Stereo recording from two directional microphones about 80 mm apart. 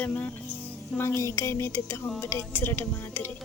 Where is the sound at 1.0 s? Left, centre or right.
Left.